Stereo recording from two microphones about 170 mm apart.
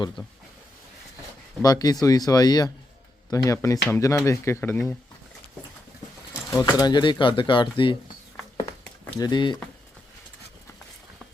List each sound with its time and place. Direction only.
1.6 s speech: 20° left (ahead or behind)
6.5 s speech: 20° left (ahead or behind)
9.1 s speech: 25° left (ahead or behind)